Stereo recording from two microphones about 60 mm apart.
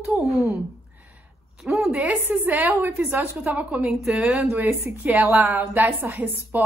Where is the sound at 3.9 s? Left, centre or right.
Centre.